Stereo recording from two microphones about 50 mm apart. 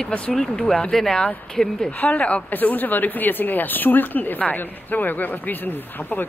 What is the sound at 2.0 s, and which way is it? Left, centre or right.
Speech, left.